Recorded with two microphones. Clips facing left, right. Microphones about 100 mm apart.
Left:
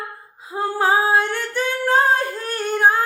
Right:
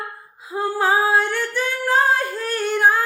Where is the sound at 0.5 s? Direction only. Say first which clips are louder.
Left 1 dB; 25° left (ahead or behind).